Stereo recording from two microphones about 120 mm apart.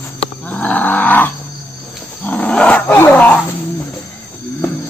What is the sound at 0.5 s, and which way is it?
Wild animals, 15° left (ahead or behind).